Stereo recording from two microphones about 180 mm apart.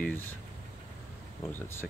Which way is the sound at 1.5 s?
10° left (ahead or behind).